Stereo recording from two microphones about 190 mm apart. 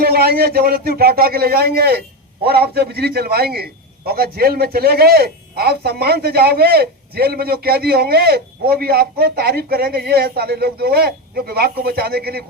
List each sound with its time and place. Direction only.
0.0 s a man's voice: 55° right (ahead or behind)